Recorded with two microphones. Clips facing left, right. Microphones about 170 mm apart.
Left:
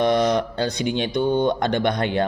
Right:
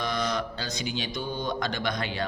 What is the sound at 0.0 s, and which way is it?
Speech, 60° left (ahead or behind).